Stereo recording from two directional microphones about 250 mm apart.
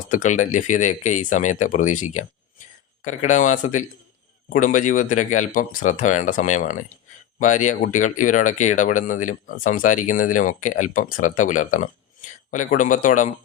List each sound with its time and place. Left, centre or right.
0.1 s speech: left